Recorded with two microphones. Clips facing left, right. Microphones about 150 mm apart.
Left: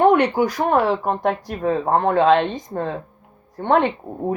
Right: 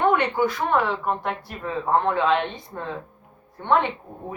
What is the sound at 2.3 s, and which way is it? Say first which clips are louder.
Speech: left 6 dB; 85° left.